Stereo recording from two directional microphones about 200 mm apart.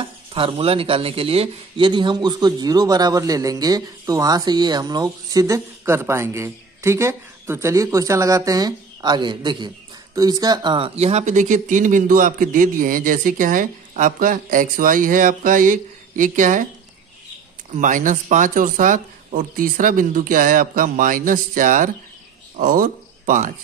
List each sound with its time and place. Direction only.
0.0 s speech: 25° right (ahead or behind)
17.7 s speech: 40° right (ahead or behind)